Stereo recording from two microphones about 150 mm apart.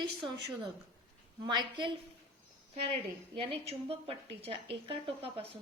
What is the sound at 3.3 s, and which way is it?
A woman's voice, 40° right (ahead or behind).